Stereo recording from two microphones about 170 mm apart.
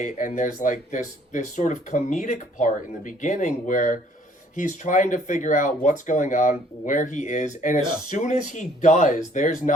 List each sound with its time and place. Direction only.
0.0 s speech: 45° left (ahead or behind)